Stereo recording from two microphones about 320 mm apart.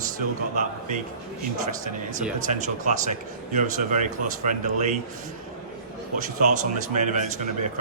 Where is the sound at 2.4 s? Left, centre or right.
Right.